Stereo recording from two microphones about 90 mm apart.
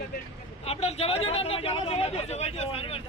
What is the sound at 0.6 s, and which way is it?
Speech, 90° left.